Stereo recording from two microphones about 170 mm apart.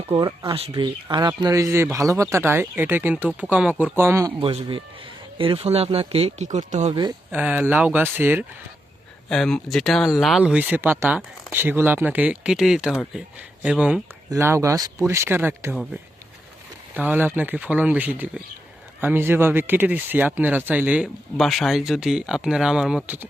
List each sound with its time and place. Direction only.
0.0 s speech: 30° right (ahead or behind); by 4.3 s 15° right (ahead or behind)
4.4 s speech: 30° right (ahead or behind)
6.9 s speech: 25° right (ahead or behind)
7.3 s speech: 10° right (ahead or behind)
9.3 s speech: 5° left (ahead or behind)
16.9 s speech: 10° right (ahead or behind)